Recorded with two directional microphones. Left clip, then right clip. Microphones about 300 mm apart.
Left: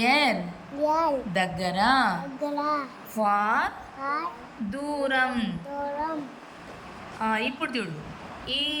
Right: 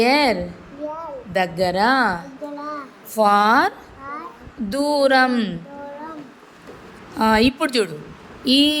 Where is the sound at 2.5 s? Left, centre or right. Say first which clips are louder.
Left 4 dB; left.